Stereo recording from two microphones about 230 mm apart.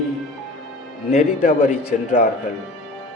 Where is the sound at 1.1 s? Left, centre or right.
Left.